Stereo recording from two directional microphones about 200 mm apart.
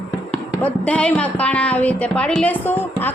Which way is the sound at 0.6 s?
5° left (ahead or behind).